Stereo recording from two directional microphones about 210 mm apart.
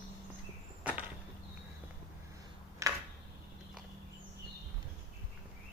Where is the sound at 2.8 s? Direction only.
15° right (ahead or behind).